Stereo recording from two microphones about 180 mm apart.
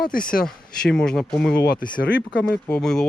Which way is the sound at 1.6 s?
55° left (ahead or behind).